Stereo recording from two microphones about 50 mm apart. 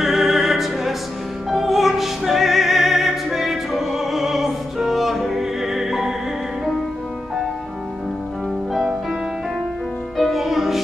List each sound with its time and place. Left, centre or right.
0.0 s music: centre
1.5 s opera: centre
10.1 s music: centre